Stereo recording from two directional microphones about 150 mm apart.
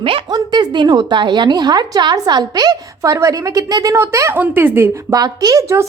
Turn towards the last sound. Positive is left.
turn(degrees=-20)  # may be behind; listen again after turning